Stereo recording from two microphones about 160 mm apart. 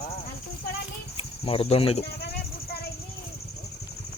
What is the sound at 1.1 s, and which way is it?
Speech, 35° left (ahead or behind).